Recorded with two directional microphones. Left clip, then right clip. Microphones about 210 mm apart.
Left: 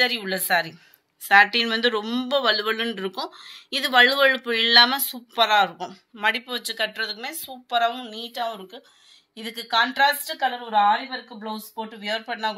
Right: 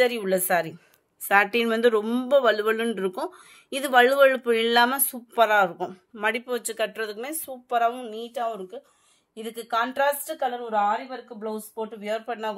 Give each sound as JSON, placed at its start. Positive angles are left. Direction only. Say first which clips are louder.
{"t": 0.0, "sound": "speech", "louder": "right 1 dB", "side_deg": -55}
{"t": 10.9, "sound": "speech", "louder": "left 5 dB", "side_deg": -45}